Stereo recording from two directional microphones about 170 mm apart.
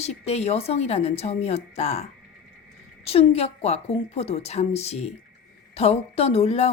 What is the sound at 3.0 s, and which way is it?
A woman's voice, 35° left (ahead or behind).